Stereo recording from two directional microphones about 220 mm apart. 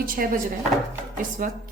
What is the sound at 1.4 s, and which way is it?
Speech, 35° right (ahead or behind).